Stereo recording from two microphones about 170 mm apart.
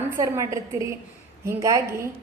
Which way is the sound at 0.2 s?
20° right (ahead or behind).